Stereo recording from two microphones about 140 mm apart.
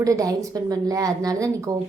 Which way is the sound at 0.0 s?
25° right (ahead or behind).